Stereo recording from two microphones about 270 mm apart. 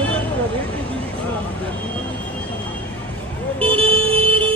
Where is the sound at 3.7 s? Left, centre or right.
Centre.